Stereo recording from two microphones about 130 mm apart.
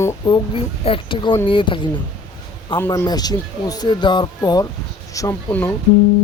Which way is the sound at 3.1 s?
30° left (ahead or behind).